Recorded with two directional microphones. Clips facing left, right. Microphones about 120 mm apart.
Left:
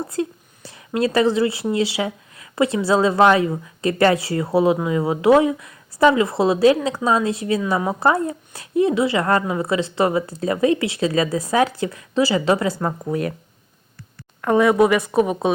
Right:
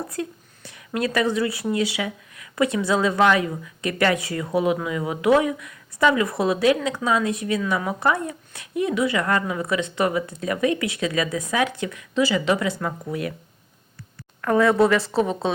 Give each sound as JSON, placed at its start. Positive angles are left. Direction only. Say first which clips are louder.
{"t": 0.1, "sound": "speech", "louder": "left 5 dB", "side_deg": 30}
{"t": 14.4, "sound": "a woman's voice", "louder": "left 2 dB", "side_deg": 20}